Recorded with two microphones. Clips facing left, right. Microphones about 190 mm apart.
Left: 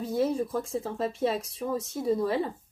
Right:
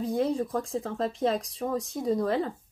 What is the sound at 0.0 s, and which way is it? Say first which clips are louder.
Speech: even; 5° left (ahead or behind).